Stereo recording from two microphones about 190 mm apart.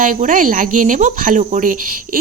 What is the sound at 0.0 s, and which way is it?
Speech, 45° right (ahead or behind).